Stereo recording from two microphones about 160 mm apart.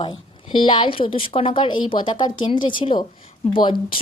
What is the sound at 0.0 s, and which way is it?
A woman's voice, 30° left (ahead or behind).